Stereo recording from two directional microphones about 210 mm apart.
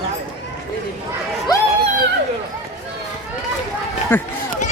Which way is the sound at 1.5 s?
20° left (ahead or behind).